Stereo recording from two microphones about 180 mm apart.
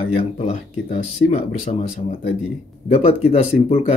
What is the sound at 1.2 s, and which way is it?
Speech, 40° left (ahead or behind).